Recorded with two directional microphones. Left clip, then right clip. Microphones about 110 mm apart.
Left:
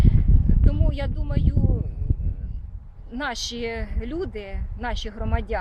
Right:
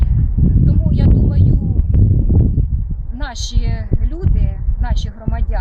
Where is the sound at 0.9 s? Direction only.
15° left (ahead or behind).